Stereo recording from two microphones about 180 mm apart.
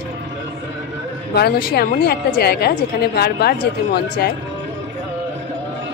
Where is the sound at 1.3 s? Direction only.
60° left (ahead or behind).